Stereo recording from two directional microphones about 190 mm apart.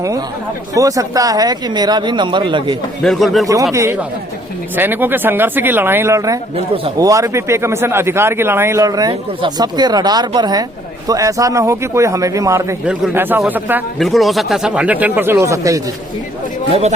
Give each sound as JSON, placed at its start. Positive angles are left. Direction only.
{"t": 0.7, "sound": "speech", "side_deg": -15}
{"t": 3.0, "sound": "speech", "side_deg": 0}
{"t": 3.4, "sound": "a man's voice", "side_deg": -15}